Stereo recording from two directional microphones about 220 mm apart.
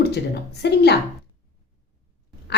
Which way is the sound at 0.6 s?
50° left (ahead or behind).